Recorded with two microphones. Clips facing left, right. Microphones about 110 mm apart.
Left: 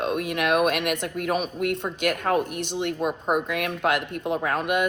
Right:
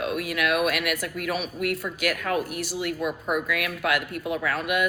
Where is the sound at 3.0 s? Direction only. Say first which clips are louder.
Left 3 dB; 40° left (ahead or behind).